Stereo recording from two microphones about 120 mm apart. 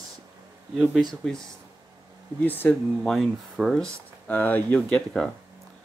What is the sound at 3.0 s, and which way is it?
Speech, centre (ahead or behind).